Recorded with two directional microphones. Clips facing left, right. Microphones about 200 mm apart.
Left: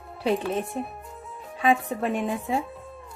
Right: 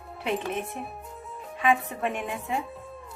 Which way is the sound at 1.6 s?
35° left (ahead or behind).